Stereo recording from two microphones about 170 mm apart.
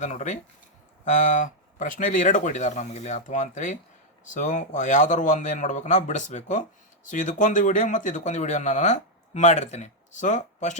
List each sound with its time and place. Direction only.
0.0 s a man's voice: 45° left (ahead or behind)